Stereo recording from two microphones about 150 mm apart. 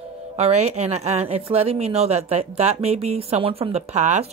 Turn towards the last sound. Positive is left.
turn(degrees=-50)  # may be behind; listen again after turning